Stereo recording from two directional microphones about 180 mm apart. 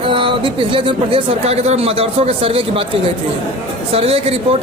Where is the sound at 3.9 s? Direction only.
35° right (ahead or behind).